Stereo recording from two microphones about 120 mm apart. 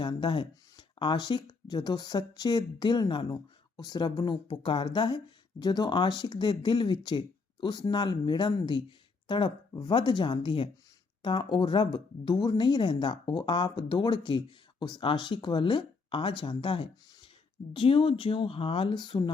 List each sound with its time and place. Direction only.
0.0 s a woman's voice: 45° left (ahead or behind)